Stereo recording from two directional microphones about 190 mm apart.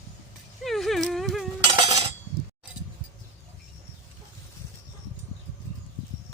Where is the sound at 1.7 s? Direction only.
30° right (ahead or behind).